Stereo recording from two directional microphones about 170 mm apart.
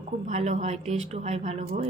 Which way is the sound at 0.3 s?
45° right (ahead or behind).